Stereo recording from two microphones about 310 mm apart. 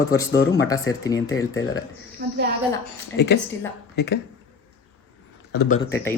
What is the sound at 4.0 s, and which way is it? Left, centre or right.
Speech, left.